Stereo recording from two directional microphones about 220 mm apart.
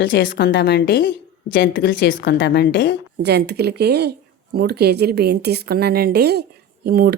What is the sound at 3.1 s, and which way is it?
Speech, 50° right (ahead or behind).